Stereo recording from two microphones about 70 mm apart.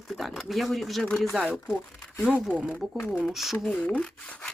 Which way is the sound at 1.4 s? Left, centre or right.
Centre.